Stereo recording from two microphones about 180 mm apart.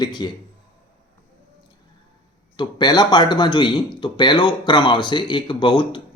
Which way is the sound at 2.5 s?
25° left (ahead or behind).